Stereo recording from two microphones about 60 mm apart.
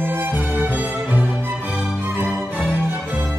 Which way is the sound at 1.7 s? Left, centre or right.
Centre.